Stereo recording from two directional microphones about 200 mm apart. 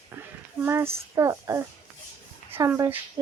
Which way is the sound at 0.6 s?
10° right (ahead or behind).